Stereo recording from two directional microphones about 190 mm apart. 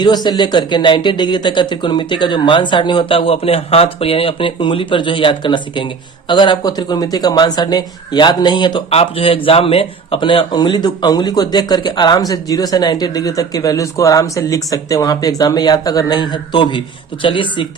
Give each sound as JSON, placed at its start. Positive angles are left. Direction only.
{"t": 0.0, "sound": "speech", "side_deg": 20}